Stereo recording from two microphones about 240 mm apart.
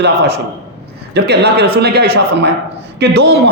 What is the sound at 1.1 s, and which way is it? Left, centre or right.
A man's voice, right.